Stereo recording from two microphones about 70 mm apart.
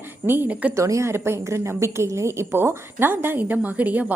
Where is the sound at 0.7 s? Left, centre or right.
Right.